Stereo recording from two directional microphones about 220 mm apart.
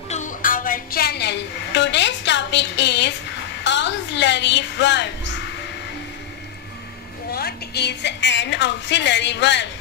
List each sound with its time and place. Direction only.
0.1 s a sound: 35° left (ahead or behind)
3.6 s a woman's voice: 55° left (ahead or behind)
7.2 s a woman's voice: 45° left (ahead or behind)